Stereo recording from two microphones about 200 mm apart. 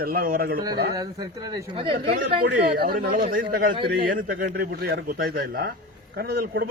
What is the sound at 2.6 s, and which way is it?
A man's voice, 50° right (ahead or behind).